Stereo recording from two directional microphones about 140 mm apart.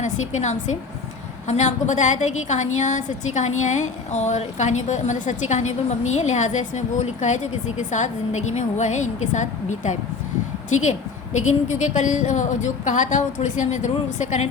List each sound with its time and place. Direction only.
0.0 s a woman's voice: 55° left (ahead or behind)
11.7 s a woman's voice: 60° left (ahead or behind)